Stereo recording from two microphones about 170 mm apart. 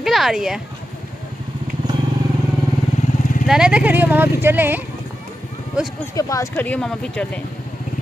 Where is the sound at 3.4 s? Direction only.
5° right (ahead or behind).